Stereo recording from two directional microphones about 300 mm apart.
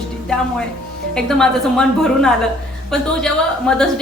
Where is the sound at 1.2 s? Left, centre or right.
Centre.